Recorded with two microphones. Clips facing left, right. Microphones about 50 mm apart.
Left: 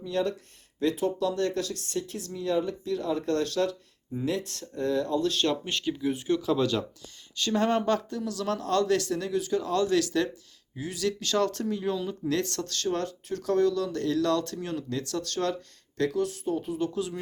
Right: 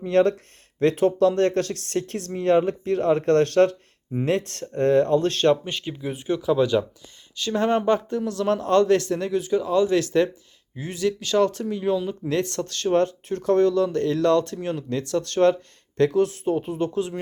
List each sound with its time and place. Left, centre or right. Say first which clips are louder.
0.0 s speech: right 9 dB; right
5.6 s speech: left 1 dB; right
7.9 s speech: right 6 dB; right
9.5 s speech: right 7 dB; centre
9.9 s speech: right 5 dB; right
11.0 s speech: right 6 dB; centre
12.3 s speech: right 5 dB; right
16.1 s speech: right 7 dB; right
16.7 s speech: right 5 dB; right